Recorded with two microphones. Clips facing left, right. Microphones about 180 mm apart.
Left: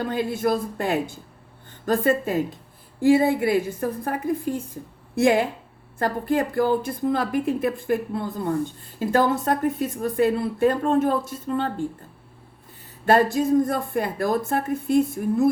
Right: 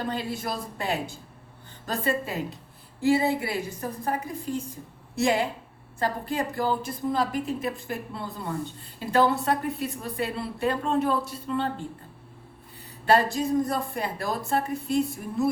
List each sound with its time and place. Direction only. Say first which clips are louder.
0.0 s a woman's voice: left 7 dB; 50° left (ahead or behind)
13.1 s a woman's voice: left 4 dB; 50° left (ahead or behind)